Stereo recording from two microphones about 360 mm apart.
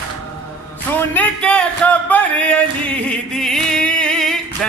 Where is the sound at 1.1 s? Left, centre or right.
Centre.